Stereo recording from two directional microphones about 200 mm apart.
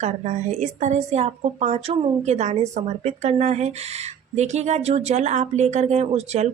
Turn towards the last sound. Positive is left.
turn(degrees=-35)  # may be behind; listen again after turning